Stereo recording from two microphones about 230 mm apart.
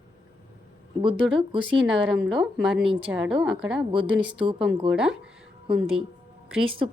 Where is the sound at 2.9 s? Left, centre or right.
Right.